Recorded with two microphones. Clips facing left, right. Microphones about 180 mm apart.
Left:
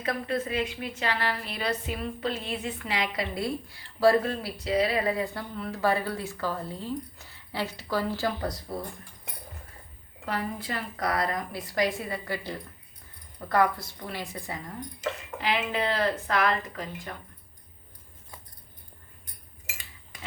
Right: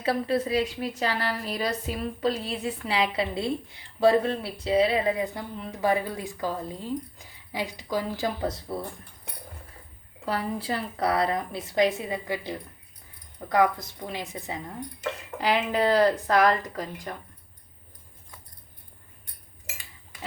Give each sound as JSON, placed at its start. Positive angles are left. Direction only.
{"t": 0.0, "sound": "a woman's voice", "side_deg": -30}
{"t": 10.2, "sound": "a woman's voice", "side_deg": -30}
{"t": 15.4, "sound": "speech", "side_deg": -40}